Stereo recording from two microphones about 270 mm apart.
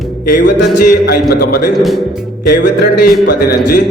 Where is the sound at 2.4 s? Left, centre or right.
Left.